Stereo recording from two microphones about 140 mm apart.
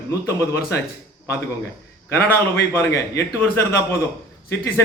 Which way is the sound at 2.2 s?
90° left.